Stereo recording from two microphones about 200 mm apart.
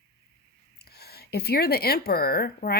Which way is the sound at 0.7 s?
55° left (ahead or behind).